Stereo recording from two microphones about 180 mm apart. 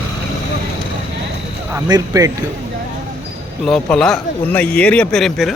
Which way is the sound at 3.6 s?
5° left (ahead or behind).